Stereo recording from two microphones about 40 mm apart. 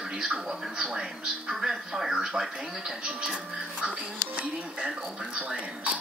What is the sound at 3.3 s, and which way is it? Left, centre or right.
Speech, right.